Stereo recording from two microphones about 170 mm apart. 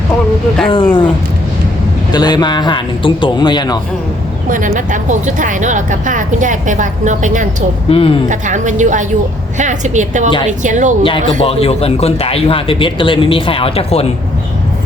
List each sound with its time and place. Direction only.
0.7 s speech: 30° left (ahead or behind)
2.1 s a man's voice: 25° left (ahead or behind)
4.4 s a woman's voice: 50° right (ahead or behind)
7.9 s speech: 35° left (ahead or behind)
8.3 s a woman's voice: 45° right (ahead or behind)
11.3 s speech: 35° left (ahead or behind)